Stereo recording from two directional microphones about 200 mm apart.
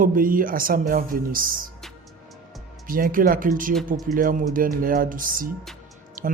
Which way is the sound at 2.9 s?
45° right (ahead or behind).